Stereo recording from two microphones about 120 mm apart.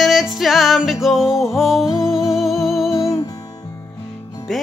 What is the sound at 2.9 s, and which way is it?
Music, 25° left (ahead or behind).